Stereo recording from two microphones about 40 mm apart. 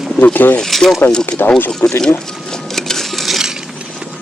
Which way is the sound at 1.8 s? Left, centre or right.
Left.